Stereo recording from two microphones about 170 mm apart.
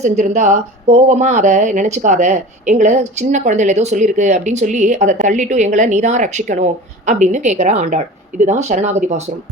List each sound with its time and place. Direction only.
0.0 s speech: 45° right (ahead or behind)